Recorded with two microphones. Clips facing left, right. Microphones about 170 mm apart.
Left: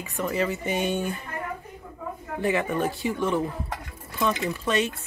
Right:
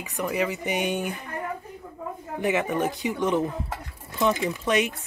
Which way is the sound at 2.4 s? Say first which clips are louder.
Even; 20° right (ahead or behind).